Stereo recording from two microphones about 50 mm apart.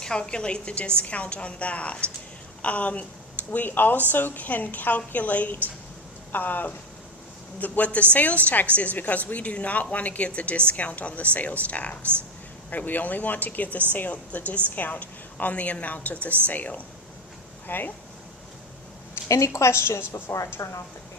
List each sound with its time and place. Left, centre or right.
0.0 s a woman's voice: centre; by 16.8 s left
17.7 s speech: left
19.3 s a woman's voice: left
20.6 s a woman's voice: left